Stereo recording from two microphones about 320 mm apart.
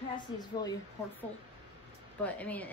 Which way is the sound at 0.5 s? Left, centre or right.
Centre.